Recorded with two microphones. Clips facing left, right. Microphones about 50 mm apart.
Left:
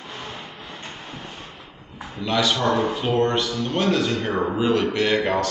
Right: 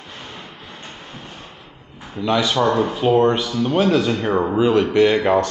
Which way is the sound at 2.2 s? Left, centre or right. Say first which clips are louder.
Right 3 dB; centre.